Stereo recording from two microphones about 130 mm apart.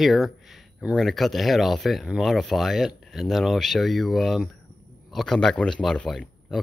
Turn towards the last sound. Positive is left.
turn(degrees=5)  # may be behind; listen again after turning